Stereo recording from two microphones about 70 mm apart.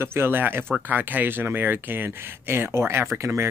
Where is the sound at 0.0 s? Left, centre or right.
Right.